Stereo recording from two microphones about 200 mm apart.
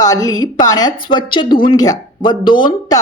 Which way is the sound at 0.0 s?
20° left (ahead or behind).